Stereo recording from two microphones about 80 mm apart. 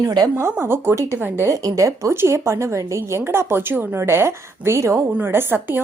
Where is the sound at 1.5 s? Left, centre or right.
Right.